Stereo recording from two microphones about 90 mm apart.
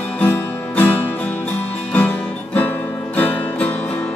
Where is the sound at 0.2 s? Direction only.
20° left (ahead or behind).